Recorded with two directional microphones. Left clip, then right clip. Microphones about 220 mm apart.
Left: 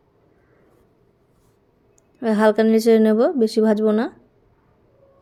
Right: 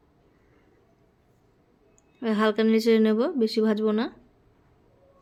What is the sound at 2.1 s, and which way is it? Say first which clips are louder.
A woman's voice: left 7 dB; 20° left (ahead or behind).